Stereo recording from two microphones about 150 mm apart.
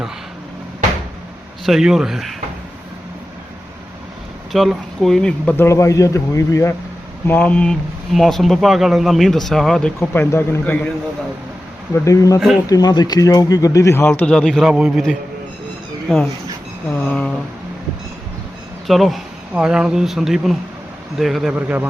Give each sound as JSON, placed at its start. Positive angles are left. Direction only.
{"t": 1.6, "sound": "speech", "side_deg": 0}
{"t": 4.5, "sound": "speech", "side_deg": 0}
{"t": 10.0, "sound": "speech", "side_deg": 15}
{"t": 12.0, "sound": "speech", "side_deg": 20}
{"t": 17.1, "sound": "a sound", "side_deg": 5}
{"t": 18.9, "sound": "speech", "side_deg": 0}